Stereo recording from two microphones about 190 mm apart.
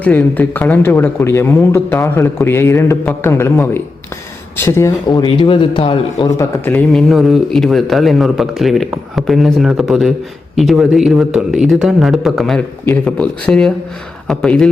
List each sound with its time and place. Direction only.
0.0 s a man's voice: 10° left (ahead or behind)
6.7 s a man's voice: centre (ahead or behind)